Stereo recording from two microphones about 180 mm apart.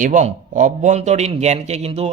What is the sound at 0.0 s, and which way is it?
A man's voice, 45° right (ahead or behind).